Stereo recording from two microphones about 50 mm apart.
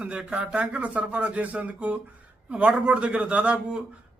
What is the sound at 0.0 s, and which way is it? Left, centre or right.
A man's voice, right.